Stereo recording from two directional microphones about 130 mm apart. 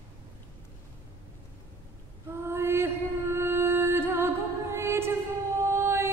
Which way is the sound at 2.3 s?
20° right (ahead or behind).